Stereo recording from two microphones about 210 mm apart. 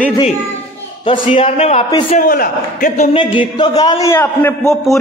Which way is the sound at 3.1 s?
25° left (ahead or behind).